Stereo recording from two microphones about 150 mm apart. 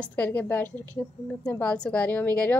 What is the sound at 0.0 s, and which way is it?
A woman's voice, 10° left (ahead or behind).